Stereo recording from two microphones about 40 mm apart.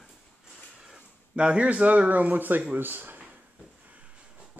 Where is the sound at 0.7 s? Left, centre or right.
Right.